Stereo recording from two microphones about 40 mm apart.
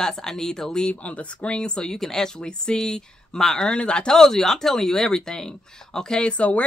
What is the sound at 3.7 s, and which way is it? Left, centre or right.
Speech, left.